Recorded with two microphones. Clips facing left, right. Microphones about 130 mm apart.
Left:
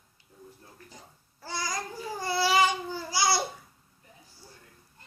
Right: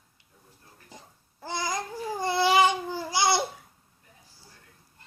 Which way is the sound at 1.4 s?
20° right (ahead or behind).